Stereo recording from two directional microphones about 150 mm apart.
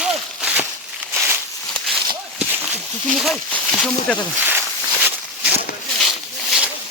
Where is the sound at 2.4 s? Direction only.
10° right (ahead or behind).